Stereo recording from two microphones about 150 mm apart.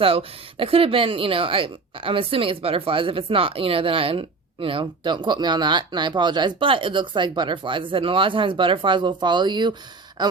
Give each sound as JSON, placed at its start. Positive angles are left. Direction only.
{"t": 0.0, "sound": "speech", "side_deg": -40}